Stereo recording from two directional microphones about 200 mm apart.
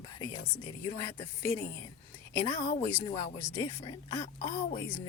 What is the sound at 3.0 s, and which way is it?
Speech, 30° left (ahead or behind).